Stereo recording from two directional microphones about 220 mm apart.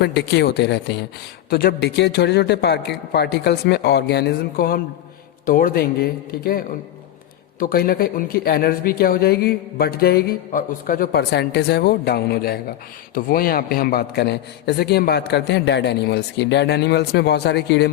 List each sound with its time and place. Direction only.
0.0 s speech: 50° left (ahead or behind)